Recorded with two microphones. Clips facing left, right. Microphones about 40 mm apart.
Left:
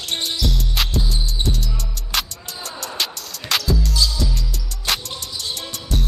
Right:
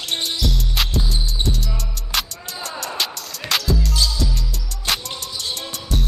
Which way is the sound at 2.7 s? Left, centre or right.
Centre.